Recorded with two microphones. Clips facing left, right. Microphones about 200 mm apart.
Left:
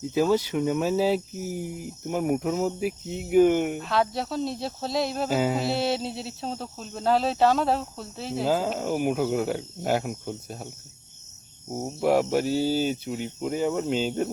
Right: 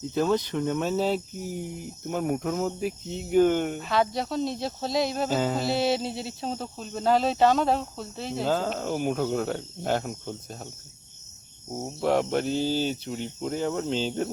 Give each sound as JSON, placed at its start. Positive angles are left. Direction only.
{"t": 0.1, "sound": "speech", "side_deg": 5}
{"t": 11.7, "sound": "speech", "side_deg": 15}